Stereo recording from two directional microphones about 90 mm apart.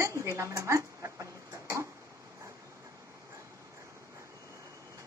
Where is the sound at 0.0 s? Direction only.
35° right (ahead or behind).